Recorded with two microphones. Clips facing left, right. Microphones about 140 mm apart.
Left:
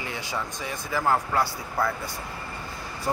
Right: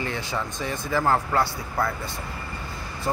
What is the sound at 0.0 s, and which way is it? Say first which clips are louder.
Speech: right 3 dB; 10° left (ahead or behind).